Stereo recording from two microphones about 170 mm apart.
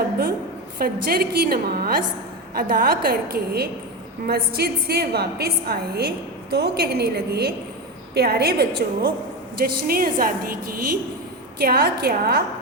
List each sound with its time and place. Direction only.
0.8 s a woman's voice: 60° right (ahead or behind)
11.6 s a woman's voice: 65° right (ahead or behind)